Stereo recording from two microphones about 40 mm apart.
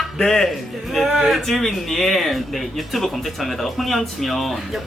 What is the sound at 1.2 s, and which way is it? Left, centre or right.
Speech, centre.